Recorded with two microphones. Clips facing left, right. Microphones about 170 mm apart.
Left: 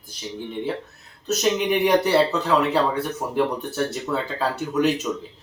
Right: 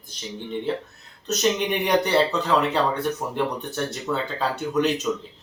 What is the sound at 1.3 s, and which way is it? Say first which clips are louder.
Speech: left 2 dB; 5° left (ahead or behind).